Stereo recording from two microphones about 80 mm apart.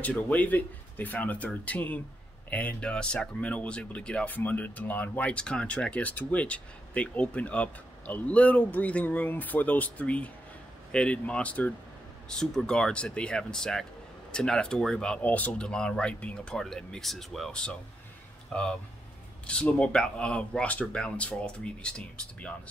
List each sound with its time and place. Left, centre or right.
0.0 s speech: centre
12.3 s speech: centre
15.2 s speech: centre